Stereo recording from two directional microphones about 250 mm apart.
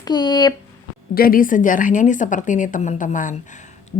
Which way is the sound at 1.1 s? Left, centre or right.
Left.